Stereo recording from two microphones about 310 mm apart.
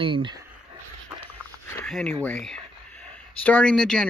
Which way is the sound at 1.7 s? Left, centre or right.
Centre.